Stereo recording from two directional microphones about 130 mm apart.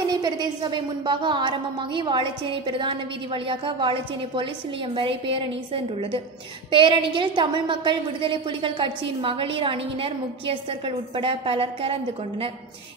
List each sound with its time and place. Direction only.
0.1 s a woman's voice: 35° right (ahead or behind)